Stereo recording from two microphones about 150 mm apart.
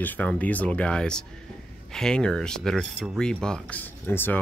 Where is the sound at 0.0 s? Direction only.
10° left (ahead or behind).